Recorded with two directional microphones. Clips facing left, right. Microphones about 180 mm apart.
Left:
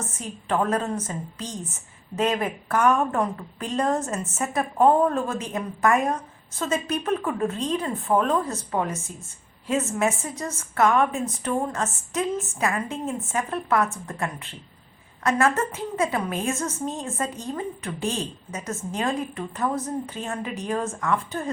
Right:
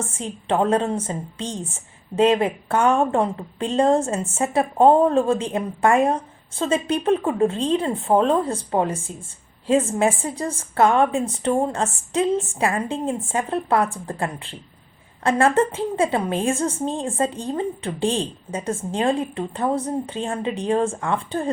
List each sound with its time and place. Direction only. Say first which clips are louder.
0.0 s a woman's voice: right 5 dB; 30° right (ahead or behind)